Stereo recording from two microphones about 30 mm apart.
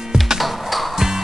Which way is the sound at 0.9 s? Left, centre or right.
Centre.